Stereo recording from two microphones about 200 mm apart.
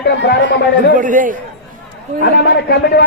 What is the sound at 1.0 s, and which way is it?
Speech, 40° right (ahead or behind).